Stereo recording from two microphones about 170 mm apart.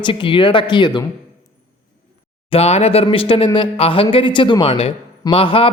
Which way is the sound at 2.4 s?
35° left (ahead or behind).